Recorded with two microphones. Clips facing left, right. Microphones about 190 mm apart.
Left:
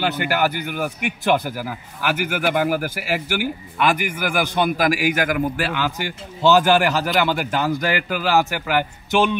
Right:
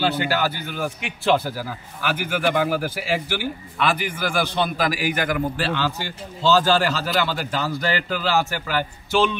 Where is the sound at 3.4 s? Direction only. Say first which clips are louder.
Left 3 dB; 15° left (ahead or behind).